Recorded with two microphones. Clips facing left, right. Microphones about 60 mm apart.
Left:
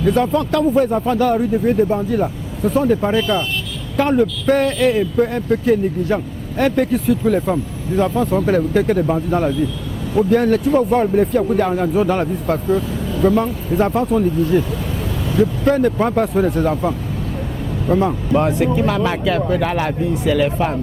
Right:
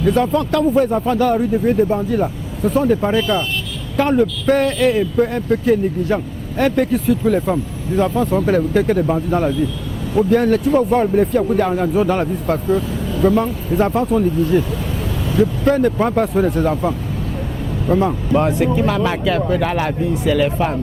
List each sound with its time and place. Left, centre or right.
0.0 s speech: right